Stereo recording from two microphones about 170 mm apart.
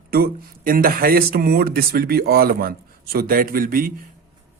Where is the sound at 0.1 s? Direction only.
60° right (ahead or behind).